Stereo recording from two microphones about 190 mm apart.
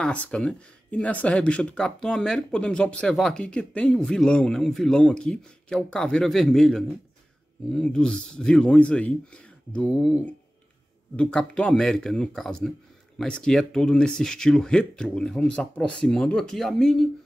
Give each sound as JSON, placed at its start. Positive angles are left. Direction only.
{"t": 0.0, "sound": "speech", "side_deg": 5}